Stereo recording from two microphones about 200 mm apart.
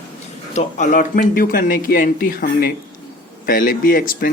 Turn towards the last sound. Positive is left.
turn(degrees=45)  # may be behind; listen again after turning